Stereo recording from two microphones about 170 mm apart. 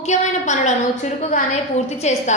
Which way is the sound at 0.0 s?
45° left (ahead or behind).